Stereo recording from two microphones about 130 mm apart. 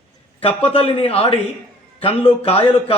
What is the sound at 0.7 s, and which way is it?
A man's voice, 50° left (ahead or behind).